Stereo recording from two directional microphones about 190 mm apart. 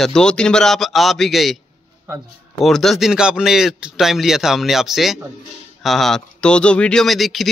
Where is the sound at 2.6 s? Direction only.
Centre (ahead or behind).